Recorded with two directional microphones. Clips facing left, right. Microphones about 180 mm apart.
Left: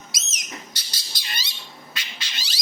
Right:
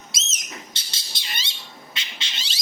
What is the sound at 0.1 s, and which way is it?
Bird, 25° right (ahead or behind).